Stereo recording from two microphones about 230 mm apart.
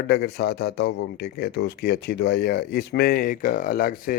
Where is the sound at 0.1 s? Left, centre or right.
Left.